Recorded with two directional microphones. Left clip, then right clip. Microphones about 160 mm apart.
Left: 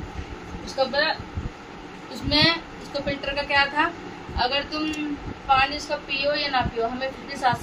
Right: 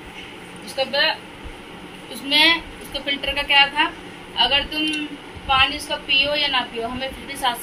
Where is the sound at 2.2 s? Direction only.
20° left (ahead or behind).